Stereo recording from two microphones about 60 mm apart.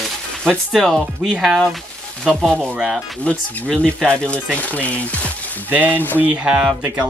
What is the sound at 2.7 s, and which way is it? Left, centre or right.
Speech, right.